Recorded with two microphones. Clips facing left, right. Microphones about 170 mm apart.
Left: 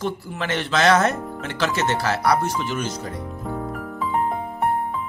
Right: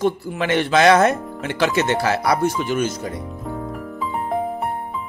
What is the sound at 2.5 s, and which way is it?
Speech, 50° right (ahead or behind).